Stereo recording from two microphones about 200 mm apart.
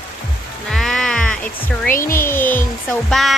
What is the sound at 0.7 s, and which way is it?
Livestock, centre (ahead or behind).